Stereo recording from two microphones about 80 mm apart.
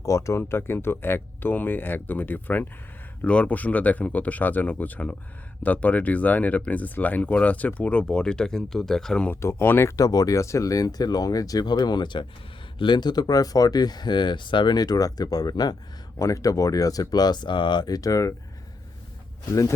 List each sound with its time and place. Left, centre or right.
0.0 s speech: left; by 9.3 s centre
9.3 s speech: left
10.0 s speech: left
16.1 s speech: left